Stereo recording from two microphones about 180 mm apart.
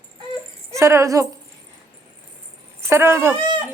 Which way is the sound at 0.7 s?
15° right (ahead or behind).